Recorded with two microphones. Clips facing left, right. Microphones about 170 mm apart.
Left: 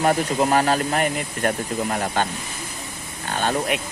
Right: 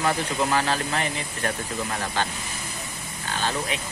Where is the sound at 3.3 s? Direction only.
60° left (ahead or behind).